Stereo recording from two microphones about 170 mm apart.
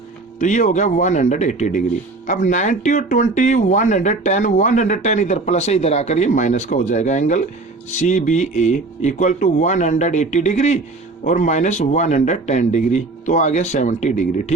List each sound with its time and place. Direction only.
0.3 s speech: 45° left (ahead or behind)